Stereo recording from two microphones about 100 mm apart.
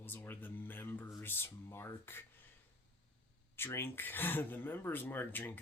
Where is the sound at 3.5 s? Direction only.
25° left (ahead or behind).